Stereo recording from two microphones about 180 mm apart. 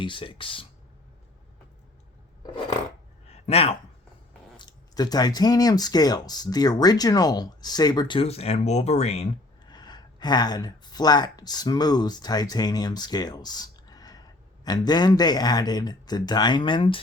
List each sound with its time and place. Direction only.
0.0 s speech: 30° left (ahead or behind)
3.2 s a sound: 35° left (ahead or behind)
4.5 s speech: 25° left (ahead or behind)
9.6 s speech: 25° left (ahead or behind)